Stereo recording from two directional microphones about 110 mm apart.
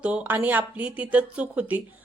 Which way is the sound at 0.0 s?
10° right (ahead or behind).